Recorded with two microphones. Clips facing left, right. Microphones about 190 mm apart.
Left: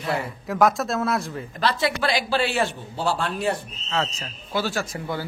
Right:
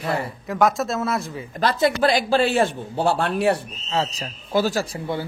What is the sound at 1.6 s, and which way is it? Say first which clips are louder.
A man's voice: right 5 dB; 45° right (ahead or behind).